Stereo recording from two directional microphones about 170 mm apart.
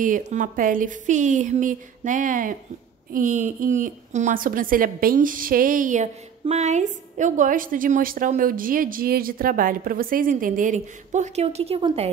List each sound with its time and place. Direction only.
0.0 s a woman's voice: 45° right (ahead or behind)